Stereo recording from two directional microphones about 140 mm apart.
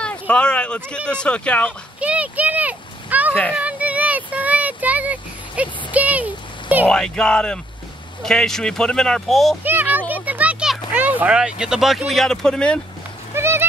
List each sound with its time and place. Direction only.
0.0 s speech: 10° left (ahead or behind)
2.0 s a sound: 10° right (ahead or behind)
3.5 s child singing: 10° right (ahead or behind)
6.9 s speech: 5° left (ahead or behind)
9.6 s a child's voice: 15° right (ahead or behind); by 12.8 s 5° left (ahead or behind)
13.3 s a sound: 15° right (ahead or behind)